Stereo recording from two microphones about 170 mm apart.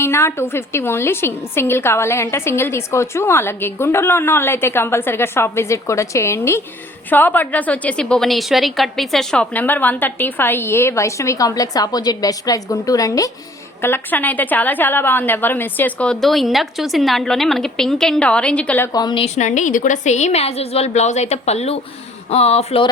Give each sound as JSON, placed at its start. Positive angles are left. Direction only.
{"t": 0.0, "sound": "a woman's voice", "side_deg": 15}
{"t": 18.9, "sound": "a woman's voice", "side_deg": 25}
{"t": 19.2, "sound": "a woman's voice", "side_deg": 45}